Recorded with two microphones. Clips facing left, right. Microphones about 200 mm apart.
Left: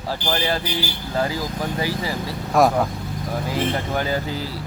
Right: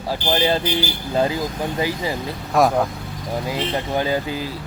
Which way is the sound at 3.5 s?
15° right (ahead or behind).